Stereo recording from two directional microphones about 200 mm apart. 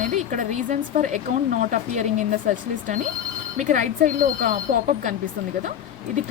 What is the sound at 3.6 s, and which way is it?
Speech, 40° right (ahead or behind).